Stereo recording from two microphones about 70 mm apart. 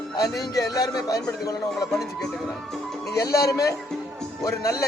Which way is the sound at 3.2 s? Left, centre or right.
Left.